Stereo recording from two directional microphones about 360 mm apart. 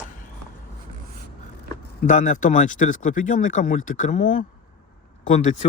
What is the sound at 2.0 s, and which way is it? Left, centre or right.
Speech, left.